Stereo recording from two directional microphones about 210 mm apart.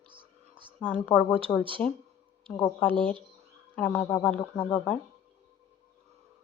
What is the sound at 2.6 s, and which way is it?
Speech, 5° left (ahead or behind).